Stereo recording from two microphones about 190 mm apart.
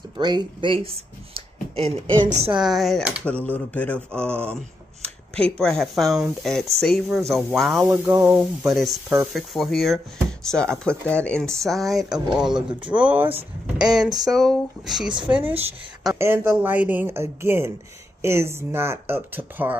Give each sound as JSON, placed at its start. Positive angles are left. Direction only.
{"t": 0.2, "sound": "speech", "side_deg": -20}
{"t": 2.6, "sound": "speech", "side_deg": 0}
{"t": 3.3, "sound": "speech", "side_deg": 10}
{"t": 15.4, "sound": "a woman's voice", "side_deg": -30}
{"t": 16.2, "sound": "speech", "side_deg": -10}